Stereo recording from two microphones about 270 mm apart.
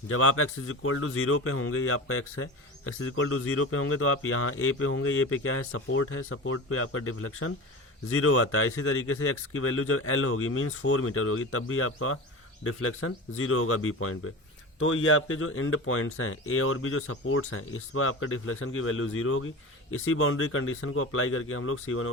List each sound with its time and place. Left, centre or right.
0.1 s speech: left